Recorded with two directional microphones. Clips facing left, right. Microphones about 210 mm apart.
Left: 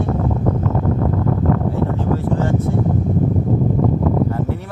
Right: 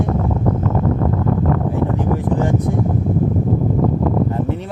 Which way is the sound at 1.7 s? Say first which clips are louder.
Right 1 dB; 15° right (ahead or behind).